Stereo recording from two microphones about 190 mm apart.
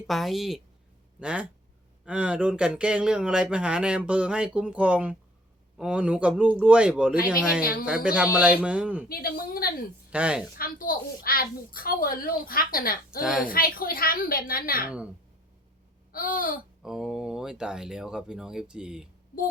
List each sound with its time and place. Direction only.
0.1 s speech: centre (ahead or behind)
9.0 s a woman's voice: 50° left (ahead or behind)
10.1 s a woman's voice: 5° right (ahead or behind)
10.6 s a woman's voice: 50° left (ahead or behind)
16.1 s a woman's voice: 50° left (ahead or behind)
16.8 s speech: centre (ahead or behind)